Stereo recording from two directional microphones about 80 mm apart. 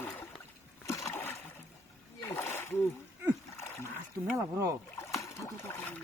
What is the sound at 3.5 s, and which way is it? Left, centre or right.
Splash, left.